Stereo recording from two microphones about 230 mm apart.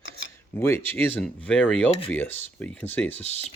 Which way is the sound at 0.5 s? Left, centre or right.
Centre.